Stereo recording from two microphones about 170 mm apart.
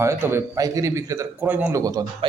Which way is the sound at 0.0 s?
15° right (ahead or behind).